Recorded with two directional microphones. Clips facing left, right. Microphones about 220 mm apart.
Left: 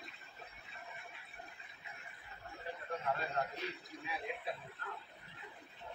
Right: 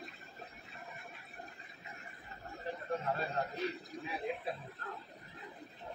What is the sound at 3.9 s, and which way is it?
Chuckle, 40° right (ahead or behind).